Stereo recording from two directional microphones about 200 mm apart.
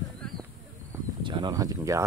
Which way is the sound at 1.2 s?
25° right (ahead or behind).